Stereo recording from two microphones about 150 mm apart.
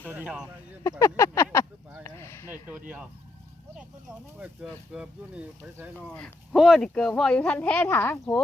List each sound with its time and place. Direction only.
0.0 s speech: 10° right (ahead or behind)
0.9 s speech: 20° left (ahead or behind)
2.0 s a sound: 20° left (ahead or behind)
2.5 s speech: 10° right (ahead or behind)
4.4 s speech: 5° right (ahead or behind)
6.1 s speech: 5° left (ahead or behind)